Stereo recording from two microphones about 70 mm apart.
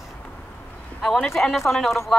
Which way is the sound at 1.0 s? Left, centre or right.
Centre.